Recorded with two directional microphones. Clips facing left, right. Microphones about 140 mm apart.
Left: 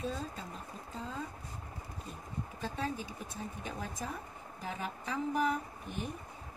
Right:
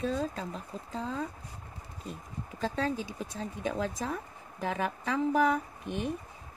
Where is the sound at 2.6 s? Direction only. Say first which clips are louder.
Right 7 dB; 90° right.